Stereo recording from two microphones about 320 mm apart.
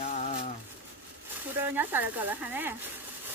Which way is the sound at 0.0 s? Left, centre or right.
Left.